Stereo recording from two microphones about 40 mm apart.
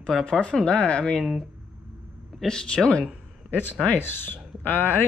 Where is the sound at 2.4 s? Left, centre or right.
Centre.